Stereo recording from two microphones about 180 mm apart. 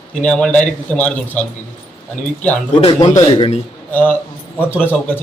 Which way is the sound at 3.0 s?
25° left (ahead or behind).